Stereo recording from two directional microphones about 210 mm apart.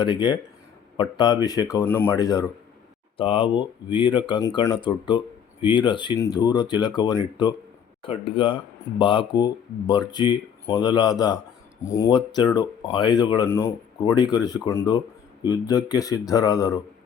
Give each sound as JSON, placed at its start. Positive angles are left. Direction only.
{"t": 0.0, "sound": "speech", "side_deg": 20}